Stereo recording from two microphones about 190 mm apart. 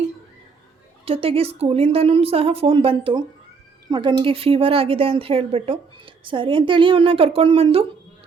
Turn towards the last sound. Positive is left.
turn(degrees=-30)  # may be behind; listen again after turning